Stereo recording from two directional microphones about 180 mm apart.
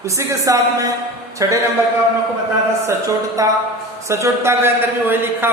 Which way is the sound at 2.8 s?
20° right (ahead or behind).